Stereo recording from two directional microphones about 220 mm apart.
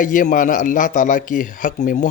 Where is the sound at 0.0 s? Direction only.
35° left (ahead or behind).